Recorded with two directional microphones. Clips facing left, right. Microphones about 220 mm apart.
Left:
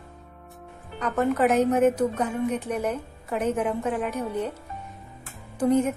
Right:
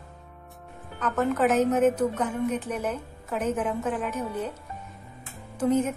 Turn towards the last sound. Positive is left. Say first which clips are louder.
# left 2 dB
turn(degrees=10)  # may be behind; listen again after turning